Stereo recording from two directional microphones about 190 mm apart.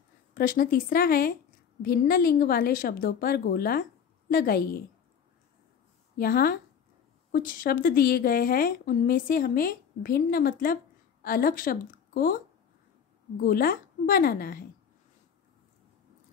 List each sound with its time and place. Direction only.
0.3 s a woman's voice: 50° left (ahead or behind)
6.1 s a woman's voice: 50° left (ahead or behind)
13.4 s a woman's voice: 50° left (ahead or behind)